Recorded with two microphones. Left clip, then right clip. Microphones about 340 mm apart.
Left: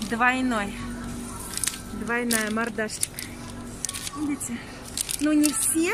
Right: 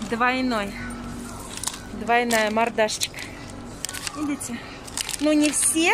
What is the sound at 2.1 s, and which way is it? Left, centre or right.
Speech, centre.